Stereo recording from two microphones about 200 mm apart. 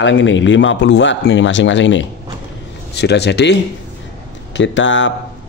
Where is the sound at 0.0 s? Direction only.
70° left (ahead or behind).